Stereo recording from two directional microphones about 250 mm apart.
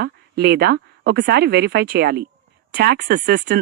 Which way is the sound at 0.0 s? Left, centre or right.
Right.